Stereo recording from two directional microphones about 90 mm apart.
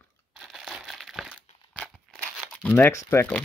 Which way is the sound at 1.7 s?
15° left (ahead or behind).